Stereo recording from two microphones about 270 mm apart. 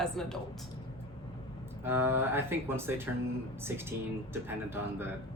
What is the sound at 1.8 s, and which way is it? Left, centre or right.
Speech, centre.